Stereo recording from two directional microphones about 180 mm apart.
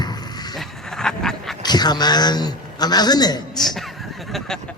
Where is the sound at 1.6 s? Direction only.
25° left (ahead or behind).